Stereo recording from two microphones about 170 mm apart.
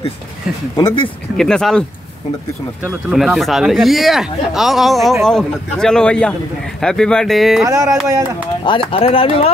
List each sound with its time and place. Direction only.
0.7 s speech: 30° left (ahead or behind)
1.3 s speech: 5° left (ahead or behind)
3.1 s speech: centre (ahead or behind)
7.6 s speech: 20° right (ahead or behind)
8.6 s speech: 30° left (ahead or behind)